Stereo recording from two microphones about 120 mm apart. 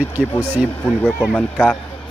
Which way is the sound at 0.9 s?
10° left (ahead or behind).